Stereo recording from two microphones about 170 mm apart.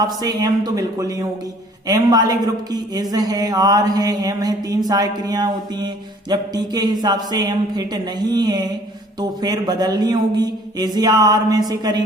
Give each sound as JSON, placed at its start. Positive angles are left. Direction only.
{"t": 0.0, "sound": "mantra", "side_deg": -20}